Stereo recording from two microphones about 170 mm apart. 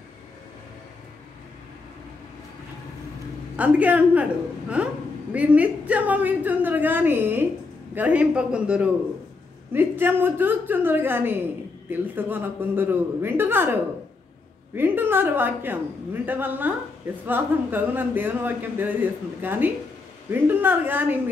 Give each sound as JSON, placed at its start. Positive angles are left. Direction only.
{"t": 3.5, "sound": "a woman's voice", "side_deg": -10}
{"t": 14.8, "sound": "a woman's voice", "side_deg": -10}